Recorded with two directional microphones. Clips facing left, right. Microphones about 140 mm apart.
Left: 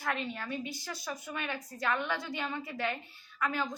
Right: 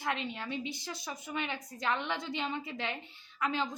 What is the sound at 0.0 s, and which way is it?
A woman's voice, 20° right (ahead or behind).